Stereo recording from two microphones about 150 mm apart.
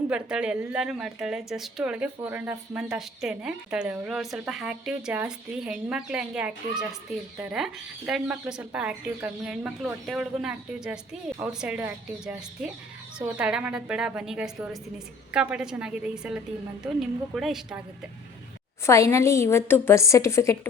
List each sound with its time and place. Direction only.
0.1 s a woman's voice: 5° right (ahead or behind)
18.9 s a woman's voice: 20° left (ahead or behind)